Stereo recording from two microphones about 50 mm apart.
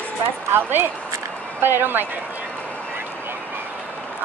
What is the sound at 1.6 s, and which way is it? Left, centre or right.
Speech, right.